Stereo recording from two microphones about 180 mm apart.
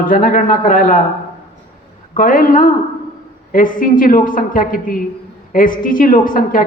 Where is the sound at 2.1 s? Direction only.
50° left (ahead or behind).